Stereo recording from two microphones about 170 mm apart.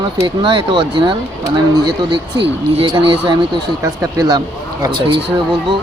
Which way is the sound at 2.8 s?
30° right (ahead or behind).